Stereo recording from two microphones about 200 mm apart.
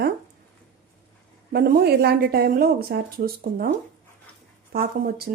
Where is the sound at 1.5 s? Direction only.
50° right (ahead or behind).